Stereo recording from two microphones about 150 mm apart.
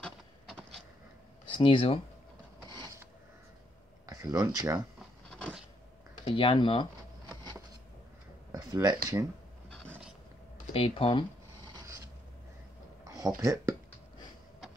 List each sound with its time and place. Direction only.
1.5 s speech: 35° left (ahead or behind)
4.0 s speech: 25° right (ahead or behind)
6.2 s speech: 35° left (ahead or behind)
7.2 s a sound: 25° right (ahead or behind)
8.5 s speech: 25° right (ahead or behind)
9.7 s a sound: 5° left (ahead or behind)
10.7 s speech: 40° left (ahead or behind)
11.6 s filing: 25° right (ahead or behind)
13.0 s a sound: 25° right (ahead or behind)
13.4 s speech: 20° right (ahead or behind)